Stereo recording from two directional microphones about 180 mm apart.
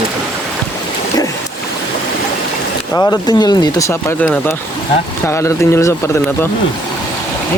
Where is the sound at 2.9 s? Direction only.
20° left (ahead or behind).